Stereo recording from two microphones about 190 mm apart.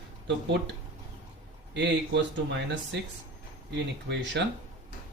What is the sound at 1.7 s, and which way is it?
A man's voice, 65° right (ahead or behind).